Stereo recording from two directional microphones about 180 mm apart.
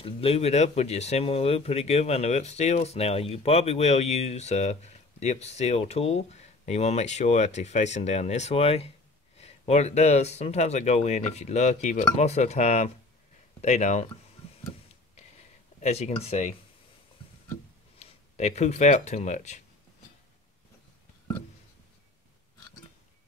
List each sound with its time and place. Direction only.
0.0 s speech: 35° left (ahead or behind)
15.8 s speech: 35° left (ahead or behind)
17.9 s speech: 35° left (ahead or behind)